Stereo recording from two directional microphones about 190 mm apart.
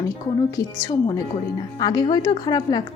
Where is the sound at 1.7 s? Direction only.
20° left (ahead or behind).